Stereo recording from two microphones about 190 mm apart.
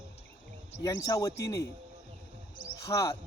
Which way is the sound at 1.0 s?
20° left (ahead or behind).